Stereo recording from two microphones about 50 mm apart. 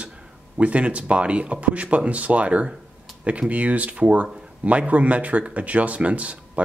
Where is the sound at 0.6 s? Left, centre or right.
Right.